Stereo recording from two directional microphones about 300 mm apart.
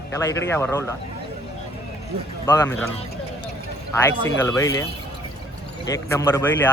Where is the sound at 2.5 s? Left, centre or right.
Centre.